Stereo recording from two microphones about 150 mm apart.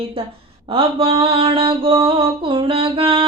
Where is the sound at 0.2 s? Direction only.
40° right (ahead or behind).